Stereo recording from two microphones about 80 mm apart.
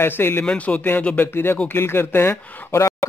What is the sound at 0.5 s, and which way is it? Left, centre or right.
Speech, centre.